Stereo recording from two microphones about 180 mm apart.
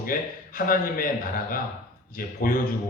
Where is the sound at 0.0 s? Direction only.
50° left (ahead or behind).